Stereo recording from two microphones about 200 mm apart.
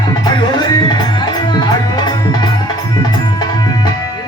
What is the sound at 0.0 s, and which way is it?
Music, 20° left (ahead or behind).